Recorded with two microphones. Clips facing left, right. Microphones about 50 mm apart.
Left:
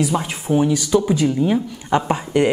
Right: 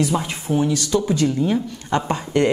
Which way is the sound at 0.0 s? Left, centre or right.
Centre.